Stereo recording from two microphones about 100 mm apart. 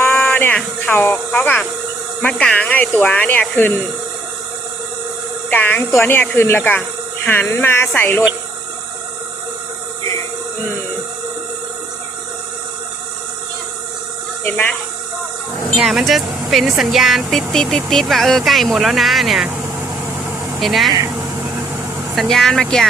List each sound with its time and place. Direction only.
0.2 s a sound: 15° left (ahead or behind)
2.2 s speech: 10° left (ahead or behind)
5.5 s speech: 20° left (ahead or behind)
14.4 s speech: 15° left (ahead or behind)
15.8 s speech: 5° right (ahead or behind)
20.6 s speech: centre (ahead or behind)
22.1 s speech: centre (ahead or behind)